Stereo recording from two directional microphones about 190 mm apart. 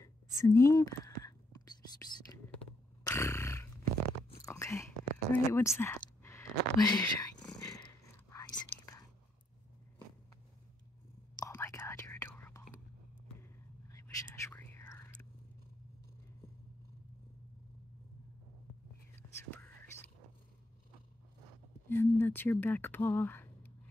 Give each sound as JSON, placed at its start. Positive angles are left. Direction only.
{"t": 0.0, "sound": "whispering", "side_deg": 15}
{"t": 3.0, "sound": "a sound", "side_deg": 15}
{"t": 4.4, "sound": "biting", "side_deg": 15}
{"t": 5.3, "sound": "speech", "side_deg": 15}
{"t": 5.8, "sound": "whispering", "side_deg": 15}
{"t": 11.3, "sound": "whispering", "side_deg": 15}
{"t": 19.1, "sound": "whispering", "side_deg": 10}
{"t": 21.8, "sound": "a sound", "side_deg": 10}